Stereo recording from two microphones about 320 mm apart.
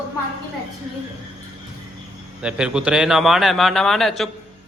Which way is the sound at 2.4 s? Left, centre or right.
Centre.